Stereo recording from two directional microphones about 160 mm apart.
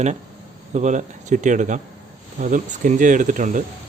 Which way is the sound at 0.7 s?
45° right (ahead or behind).